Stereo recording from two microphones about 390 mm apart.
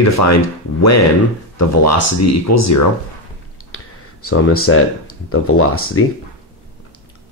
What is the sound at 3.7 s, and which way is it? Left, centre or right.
Speech, left.